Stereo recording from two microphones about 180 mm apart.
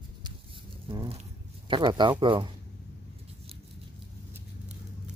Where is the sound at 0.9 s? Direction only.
25° right (ahead or behind).